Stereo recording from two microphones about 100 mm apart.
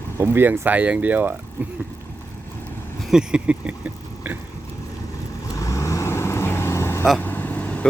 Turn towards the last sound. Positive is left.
turn(degrees=15)  # may be behind; listen again after turning